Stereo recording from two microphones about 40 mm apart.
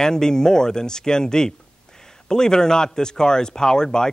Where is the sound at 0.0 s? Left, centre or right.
Centre.